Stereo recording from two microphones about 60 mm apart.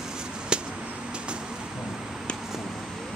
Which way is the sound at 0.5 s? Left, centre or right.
Centre.